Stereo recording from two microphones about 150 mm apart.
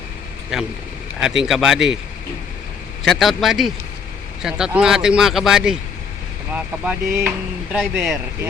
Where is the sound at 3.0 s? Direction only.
Centre (ahead or behind).